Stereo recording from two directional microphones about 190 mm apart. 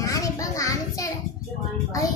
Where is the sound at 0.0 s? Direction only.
15° left (ahead or behind).